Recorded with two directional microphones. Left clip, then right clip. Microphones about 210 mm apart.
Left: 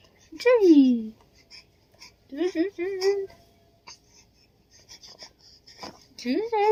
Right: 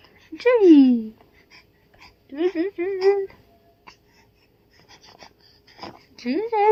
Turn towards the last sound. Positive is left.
turn(degrees=-5)  # may be behind; listen again after turning